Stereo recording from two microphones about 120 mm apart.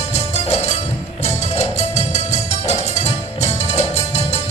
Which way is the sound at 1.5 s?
65° left (ahead or behind).